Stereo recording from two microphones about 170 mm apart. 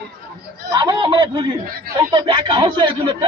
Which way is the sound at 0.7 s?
25° right (ahead or behind).